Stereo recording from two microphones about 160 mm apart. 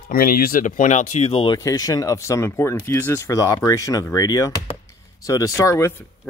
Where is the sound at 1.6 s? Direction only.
20° left (ahead or behind).